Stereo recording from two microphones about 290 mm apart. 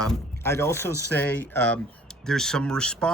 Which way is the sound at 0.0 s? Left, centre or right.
Centre.